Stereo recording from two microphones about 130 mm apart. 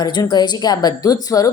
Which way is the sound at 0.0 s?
30° left (ahead or behind).